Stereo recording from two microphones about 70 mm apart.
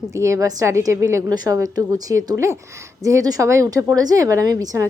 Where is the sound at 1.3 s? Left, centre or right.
Right.